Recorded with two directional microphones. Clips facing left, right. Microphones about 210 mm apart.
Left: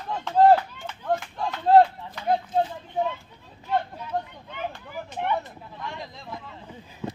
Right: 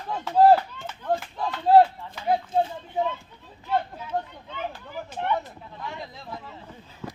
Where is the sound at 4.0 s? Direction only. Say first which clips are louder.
Even; 5° right (ahead or behind).